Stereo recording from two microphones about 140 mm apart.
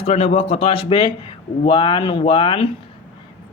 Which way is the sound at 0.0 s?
45° left (ahead or behind).